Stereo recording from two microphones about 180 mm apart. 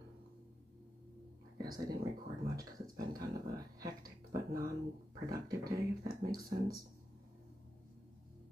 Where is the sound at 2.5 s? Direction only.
20° right (ahead or behind).